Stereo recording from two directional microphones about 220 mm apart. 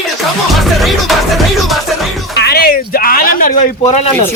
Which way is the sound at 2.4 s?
45° left (ahead or behind).